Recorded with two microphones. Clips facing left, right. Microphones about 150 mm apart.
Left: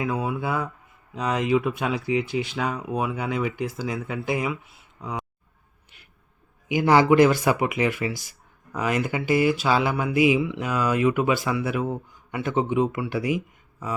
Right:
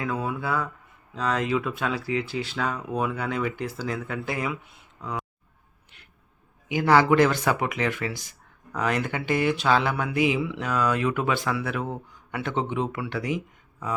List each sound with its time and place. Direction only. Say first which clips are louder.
0.0 s speech: left 2 dB; 15° left (ahead or behind)
4.9 s a sound: left 1 dB; 10° left (ahead or behind)
6.7 s speech: left 2 dB; 15° left (ahead or behind)